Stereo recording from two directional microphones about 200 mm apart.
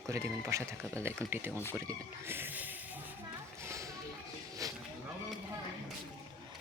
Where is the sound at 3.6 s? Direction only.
15° right (ahead or behind).